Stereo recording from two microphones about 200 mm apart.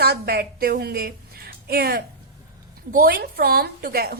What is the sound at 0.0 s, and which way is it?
A woman's voice, 55° right (ahead or behind).